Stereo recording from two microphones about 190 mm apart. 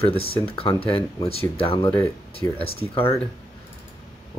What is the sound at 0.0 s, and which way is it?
Speech, 30° left (ahead or behind).